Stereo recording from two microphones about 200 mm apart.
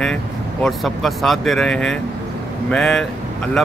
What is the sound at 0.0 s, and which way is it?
A man's voice, 5° left (ahead or behind).